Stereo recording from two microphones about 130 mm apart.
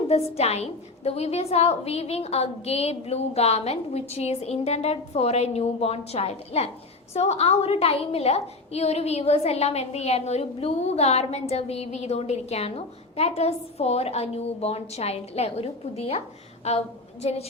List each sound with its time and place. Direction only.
0.1 s a woman's voice: 50° left (ahead or behind)
17.2 s a woman's voice: 55° left (ahead or behind)